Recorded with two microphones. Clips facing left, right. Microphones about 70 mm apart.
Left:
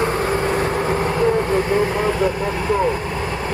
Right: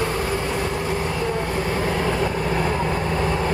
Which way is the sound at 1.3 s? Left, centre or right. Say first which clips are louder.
Left 6 dB; left.